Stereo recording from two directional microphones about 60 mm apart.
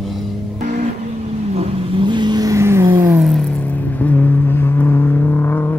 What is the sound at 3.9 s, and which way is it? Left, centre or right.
Music, left.